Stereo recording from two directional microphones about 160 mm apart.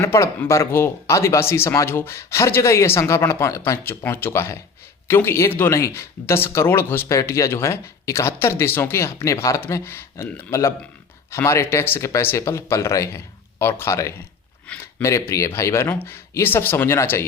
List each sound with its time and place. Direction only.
0.0 s speech: 15° left (ahead or behind)